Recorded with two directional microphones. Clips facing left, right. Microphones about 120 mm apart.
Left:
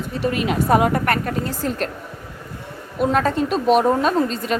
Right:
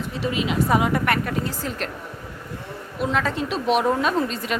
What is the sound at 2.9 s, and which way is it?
A woman's voice, 45° left (ahead or behind).